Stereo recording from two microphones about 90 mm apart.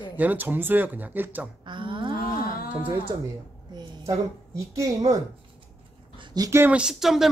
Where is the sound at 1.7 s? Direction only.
65° right (ahead or behind).